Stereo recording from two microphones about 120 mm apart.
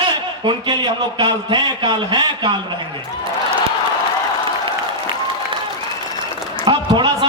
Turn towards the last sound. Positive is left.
turn(degrees=-40)  # may be behind; listen again after turning